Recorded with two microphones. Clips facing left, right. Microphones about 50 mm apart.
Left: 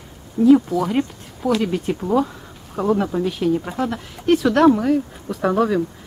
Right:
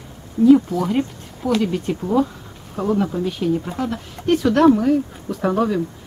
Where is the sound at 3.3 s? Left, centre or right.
Centre.